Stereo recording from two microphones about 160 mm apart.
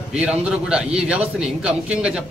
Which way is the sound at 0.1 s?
5° right (ahead or behind).